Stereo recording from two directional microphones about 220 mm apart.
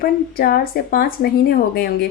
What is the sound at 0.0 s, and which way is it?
A woman's voice, 45° left (ahead or behind).